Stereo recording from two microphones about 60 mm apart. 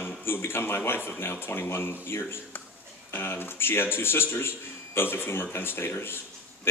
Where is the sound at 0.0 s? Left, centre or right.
Left.